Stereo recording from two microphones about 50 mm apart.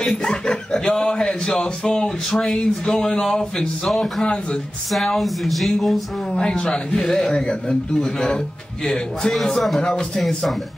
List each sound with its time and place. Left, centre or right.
0.0 s speech: centre
6.3 s speech: centre
10.2 s speech: centre